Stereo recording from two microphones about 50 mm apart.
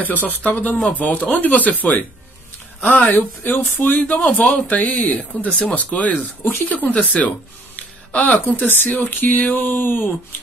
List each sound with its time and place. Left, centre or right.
0.0 s speech: left
8.4 s speech: left